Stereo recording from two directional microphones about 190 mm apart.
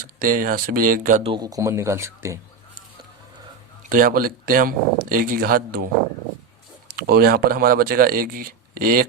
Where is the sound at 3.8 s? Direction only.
45° right (ahead or behind).